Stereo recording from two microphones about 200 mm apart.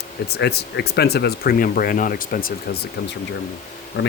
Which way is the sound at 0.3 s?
55° left (ahead or behind).